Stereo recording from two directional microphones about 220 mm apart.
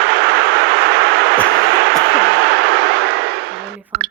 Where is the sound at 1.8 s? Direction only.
50° right (ahead or behind).